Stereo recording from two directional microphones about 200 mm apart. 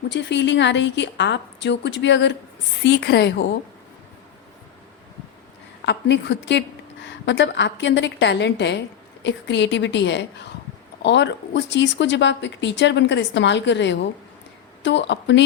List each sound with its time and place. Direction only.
0.1 s speech: 60° left (ahead or behind)
5.8 s speech: 60° left (ahead or behind)